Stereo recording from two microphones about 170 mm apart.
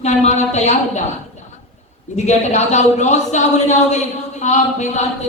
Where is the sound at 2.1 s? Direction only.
45° left (ahead or behind).